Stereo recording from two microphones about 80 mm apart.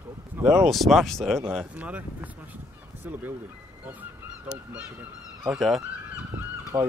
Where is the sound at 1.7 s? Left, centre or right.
Centre.